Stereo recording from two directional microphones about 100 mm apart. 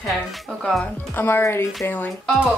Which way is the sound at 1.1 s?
20° left (ahead or behind).